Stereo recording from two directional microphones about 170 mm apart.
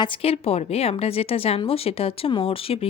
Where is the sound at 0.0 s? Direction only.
35° left (ahead or behind).